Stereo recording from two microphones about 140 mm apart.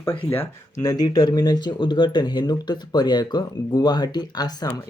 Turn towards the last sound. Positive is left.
turn(degrees=25)  # may be behind; listen again after turning